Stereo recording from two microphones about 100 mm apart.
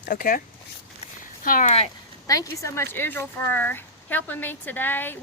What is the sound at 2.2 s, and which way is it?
Speech, 35° left (ahead or behind).